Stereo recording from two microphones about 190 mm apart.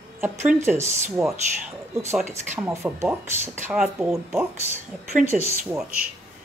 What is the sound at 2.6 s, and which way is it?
Speech, 15° right (ahead or behind).